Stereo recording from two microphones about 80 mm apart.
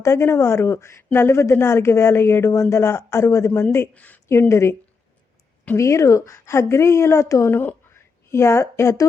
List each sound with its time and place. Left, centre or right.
0.0 s a woman's voice: left
3.9 s speech: centre
4.3 s a woman's voice: left
5.7 s a woman's voice: left